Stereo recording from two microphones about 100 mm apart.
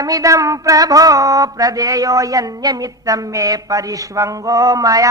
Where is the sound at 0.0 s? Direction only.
35° right (ahead or behind).